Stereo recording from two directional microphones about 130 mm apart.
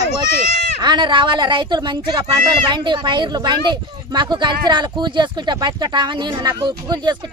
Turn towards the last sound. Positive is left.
turn(degrees=-35)  # may be behind; listen again after turning